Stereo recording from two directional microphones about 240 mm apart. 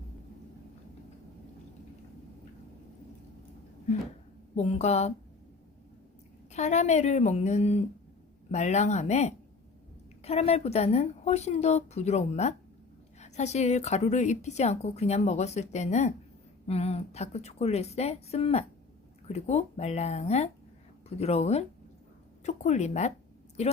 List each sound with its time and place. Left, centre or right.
4.5 s a woman's voice: left
6.5 s a woman's voice: left